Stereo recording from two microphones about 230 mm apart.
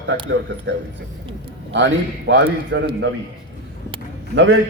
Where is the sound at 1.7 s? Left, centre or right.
Right.